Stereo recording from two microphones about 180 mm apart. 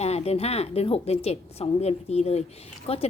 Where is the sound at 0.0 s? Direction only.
35° left (ahead or behind).